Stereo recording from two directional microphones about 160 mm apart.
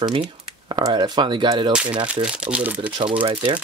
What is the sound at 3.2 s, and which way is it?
Speech, 35° right (ahead or behind).